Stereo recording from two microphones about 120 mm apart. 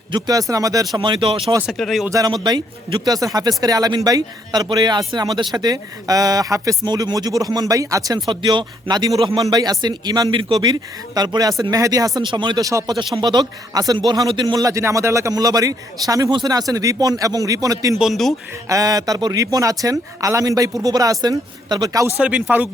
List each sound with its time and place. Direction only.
0.1 s speech: 30° right (ahead or behind)
0.9 s speech: 40° right (ahead or behind)
1.6 s speech: centre (ahead or behind)
2.0 s speech: 30° right (ahead or behind)
9.1 s speech: 45° right (ahead or behind)
9.4 s speech: 30° right (ahead or behind)
12.2 s speech: 40° right (ahead or behind)
12.6 s speech: 30° right (ahead or behind)
17.9 s speech: centre (ahead or behind)
18.7 s speech: 30° right (ahead or behind)
22.2 s speech: 10° right (ahead or behind)